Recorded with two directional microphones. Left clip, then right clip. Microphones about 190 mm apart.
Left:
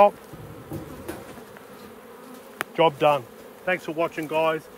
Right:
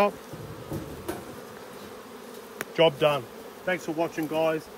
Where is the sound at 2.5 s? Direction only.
20° left (ahead or behind).